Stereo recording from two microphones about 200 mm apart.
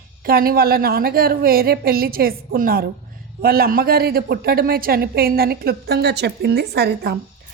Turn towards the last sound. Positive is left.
turn(degrees=-55)  # may be behind; listen again after turning